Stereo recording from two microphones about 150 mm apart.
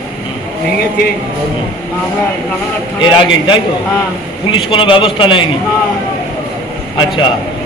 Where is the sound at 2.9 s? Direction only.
35° left (ahead or behind).